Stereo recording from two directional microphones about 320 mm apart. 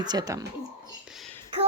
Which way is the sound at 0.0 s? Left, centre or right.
Centre.